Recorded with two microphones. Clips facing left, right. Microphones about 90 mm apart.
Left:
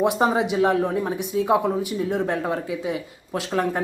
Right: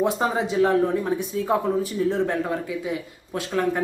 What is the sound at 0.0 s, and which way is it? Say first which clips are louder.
Speech: left 3 dB; 20° left (ahead or behind).